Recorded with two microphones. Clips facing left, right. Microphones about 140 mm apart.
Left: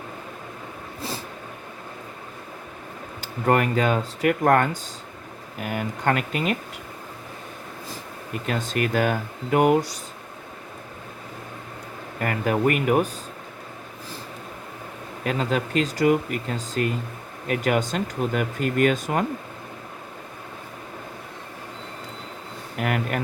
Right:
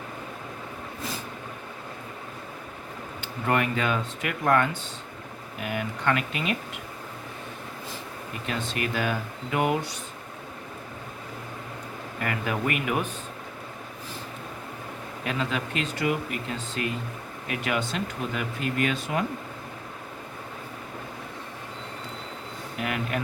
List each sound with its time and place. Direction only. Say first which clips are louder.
3.2 s speech: left 5 dB; 40° left (ahead or behind)
8.4 s speech: left 5 dB; 45° left (ahead or behind)
12.2 s speech: left 6 dB; 40° left (ahead or behind)
15.2 s speech: left 5 dB; 40° left (ahead or behind)
22.8 s speech: left 4 dB; 50° left (ahead or behind)